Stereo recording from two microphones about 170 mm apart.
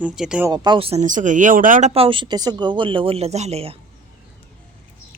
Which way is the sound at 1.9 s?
30° right (ahead or behind).